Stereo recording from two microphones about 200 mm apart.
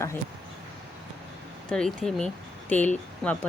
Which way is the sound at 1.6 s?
5° left (ahead or behind).